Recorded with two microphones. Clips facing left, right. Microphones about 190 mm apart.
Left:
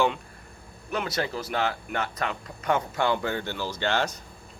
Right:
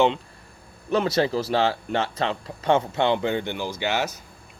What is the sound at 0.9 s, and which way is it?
Speech, 30° right (ahead or behind).